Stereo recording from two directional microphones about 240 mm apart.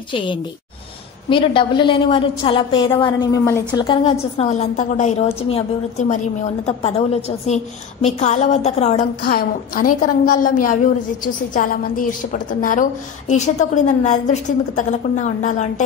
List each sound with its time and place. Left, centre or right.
1.3 s a woman's voice: left